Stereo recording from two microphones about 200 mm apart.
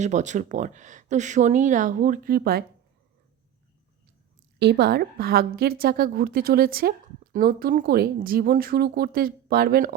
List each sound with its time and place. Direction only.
0.0 s speech: 35° right (ahead or behind)
4.6 s speech: 55° right (ahead or behind)